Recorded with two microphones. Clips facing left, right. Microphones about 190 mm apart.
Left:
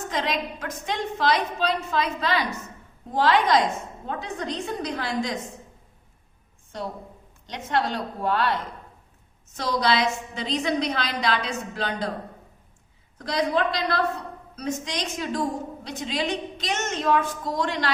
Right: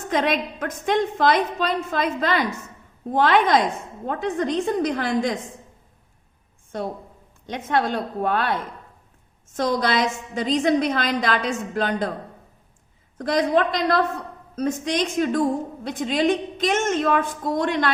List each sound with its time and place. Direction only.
0.1 s a woman's voice: 55° right (ahead or behind)
6.7 s a woman's voice: 55° right (ahead or behind)
13.1 s a woman's voice: 50° right (ahead or behind)